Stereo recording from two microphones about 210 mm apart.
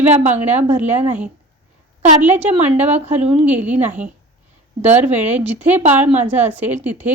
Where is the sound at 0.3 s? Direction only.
10° right (ahead or behind).